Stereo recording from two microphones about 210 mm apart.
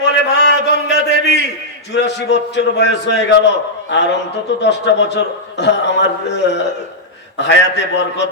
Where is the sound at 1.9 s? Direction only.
55° left (ahead or behind).